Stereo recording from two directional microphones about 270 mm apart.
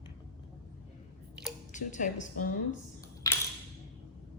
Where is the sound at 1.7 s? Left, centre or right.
Left.